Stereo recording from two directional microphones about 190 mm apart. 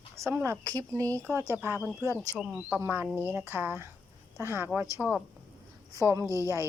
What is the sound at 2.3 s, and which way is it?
Speech, 5° right (ahead or behind).